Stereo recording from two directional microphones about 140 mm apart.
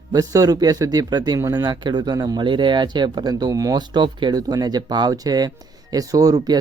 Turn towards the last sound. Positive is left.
turn(degrees=-25)  # may be behind; listen again after turning